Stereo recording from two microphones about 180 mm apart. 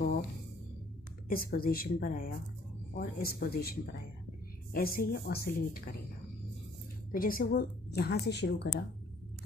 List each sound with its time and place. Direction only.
1.3 s a woman's voice: 55° left (ahead or behind)
7.1 s a woman's voice: 50° left (ahead or behind); by 8.8 s 70° left (ahead or behind)